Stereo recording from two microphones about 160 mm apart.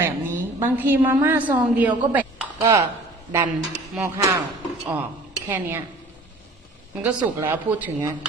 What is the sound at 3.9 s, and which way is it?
Speech, 15° right (ahead or behind).